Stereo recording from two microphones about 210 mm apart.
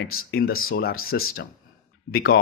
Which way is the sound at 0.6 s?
75° left (ahead or behind).